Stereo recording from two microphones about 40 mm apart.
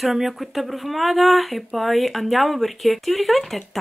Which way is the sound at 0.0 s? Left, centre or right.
Centre.